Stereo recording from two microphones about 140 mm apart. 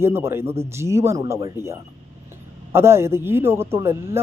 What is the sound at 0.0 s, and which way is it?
A man's voice, 15° right (ahead or behind).